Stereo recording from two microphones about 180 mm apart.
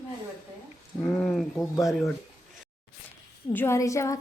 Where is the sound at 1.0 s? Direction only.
5° left (ahead or behind).